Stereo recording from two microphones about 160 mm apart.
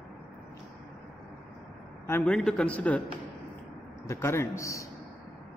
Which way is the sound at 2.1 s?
15° left (ahead or behind).